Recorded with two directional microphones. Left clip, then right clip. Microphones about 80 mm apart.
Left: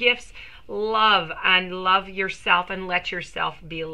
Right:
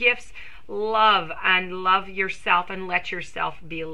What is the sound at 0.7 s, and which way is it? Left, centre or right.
Speech, right.